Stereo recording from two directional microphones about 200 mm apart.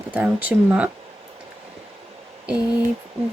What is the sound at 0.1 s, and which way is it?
Speech, 10° right (ahead or behind).